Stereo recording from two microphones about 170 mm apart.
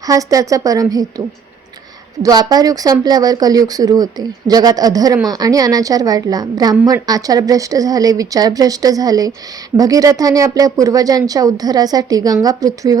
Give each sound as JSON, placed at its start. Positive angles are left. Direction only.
{"t": 0.0, "sound": "speech", "side_deg": -20}
{"t": 2.2, "sound": "speech", "side_deg": -20}